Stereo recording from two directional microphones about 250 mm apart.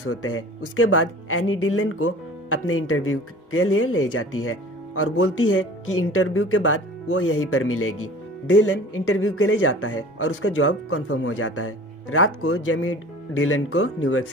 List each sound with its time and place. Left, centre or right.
0.0 s speech: left